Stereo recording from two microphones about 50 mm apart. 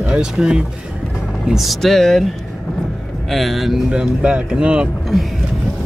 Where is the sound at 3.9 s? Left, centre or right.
Right.